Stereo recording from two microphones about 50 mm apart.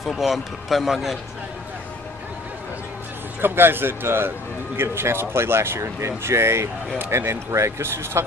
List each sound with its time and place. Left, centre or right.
0.0 s a man's voice: centre
3.3 s speech: right